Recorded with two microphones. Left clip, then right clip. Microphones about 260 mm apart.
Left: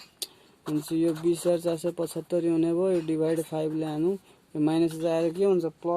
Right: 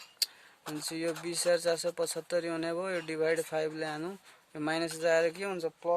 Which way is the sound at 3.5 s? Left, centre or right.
Right.